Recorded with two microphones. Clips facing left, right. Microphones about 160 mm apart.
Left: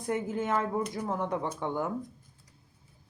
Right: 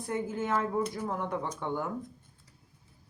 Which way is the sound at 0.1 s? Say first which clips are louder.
Left 2 dB; 20° left (ahead or behind).